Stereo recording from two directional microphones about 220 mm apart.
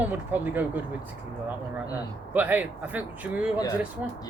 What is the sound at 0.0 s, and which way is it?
Speech, 10° right (ahead or behind).